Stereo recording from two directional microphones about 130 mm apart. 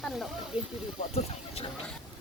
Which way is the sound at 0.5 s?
45° left (ahead or behind).